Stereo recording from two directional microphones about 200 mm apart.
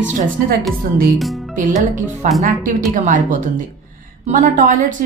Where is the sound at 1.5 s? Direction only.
40° right (ahead or behind).